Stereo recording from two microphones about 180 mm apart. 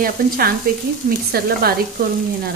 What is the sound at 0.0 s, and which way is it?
Speech, 55° right (ahead or behind).